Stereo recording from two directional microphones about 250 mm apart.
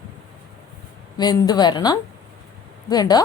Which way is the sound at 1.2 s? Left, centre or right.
Centre.